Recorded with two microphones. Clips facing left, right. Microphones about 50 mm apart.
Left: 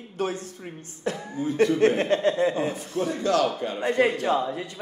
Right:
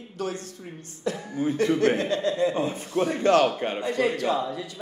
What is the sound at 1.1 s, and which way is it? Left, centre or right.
Speech, left.